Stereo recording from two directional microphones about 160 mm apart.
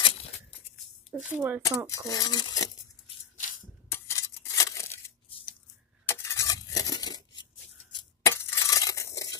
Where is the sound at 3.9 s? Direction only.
20° left (ahead or behind).